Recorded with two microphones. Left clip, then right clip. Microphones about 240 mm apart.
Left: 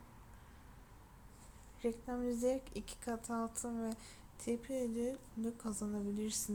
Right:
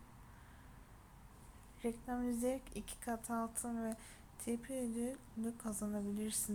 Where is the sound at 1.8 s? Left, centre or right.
Centre.